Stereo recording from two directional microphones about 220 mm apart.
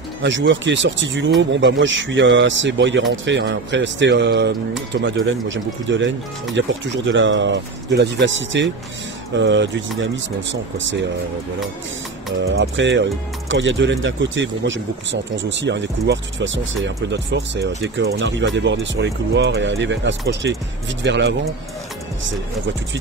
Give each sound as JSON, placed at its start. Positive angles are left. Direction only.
{"t": 0.2, "sound": "speech", "side_deg": -55}
{"t": 12.4, "sound": "speech", "side_deg": -60}